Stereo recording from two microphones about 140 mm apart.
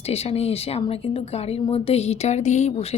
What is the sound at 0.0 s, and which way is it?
Speech, 45° left (ahead or behind).